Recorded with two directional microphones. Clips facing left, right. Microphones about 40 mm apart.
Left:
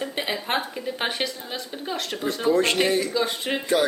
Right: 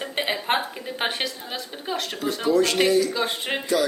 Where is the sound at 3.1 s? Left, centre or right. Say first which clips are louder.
Left 1 dB; right.